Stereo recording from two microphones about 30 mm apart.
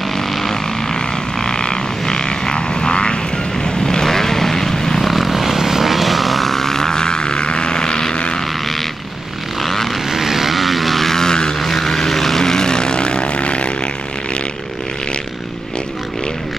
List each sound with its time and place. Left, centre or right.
0.9 s frog: left
3.6 s vehicle: left
5.0 s vehicle: centre; by 8.1 s left
9.6 s vehicle: centre
10.0 s vehicle: centre
11.2 s vehicle: left
11.6 s vehicle: centre
12.4 s vehicle: left